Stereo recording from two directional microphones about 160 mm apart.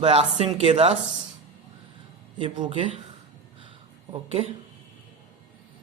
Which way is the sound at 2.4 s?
30° right (ahead or behind).